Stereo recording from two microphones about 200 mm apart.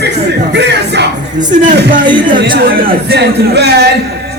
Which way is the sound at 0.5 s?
60° right (ahead or behind).